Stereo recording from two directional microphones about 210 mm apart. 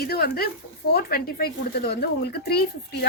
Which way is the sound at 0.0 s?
45° left (ahead or behind).